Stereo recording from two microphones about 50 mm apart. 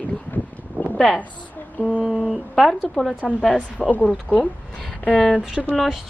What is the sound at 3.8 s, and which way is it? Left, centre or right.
Speech, left.